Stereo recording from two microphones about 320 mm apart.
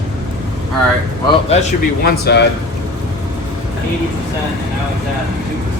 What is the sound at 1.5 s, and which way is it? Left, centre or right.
Speech, left.